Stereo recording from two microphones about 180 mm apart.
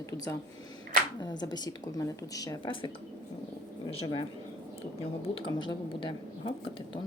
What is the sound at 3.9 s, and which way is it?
Speech, 35° left (ahead or behind).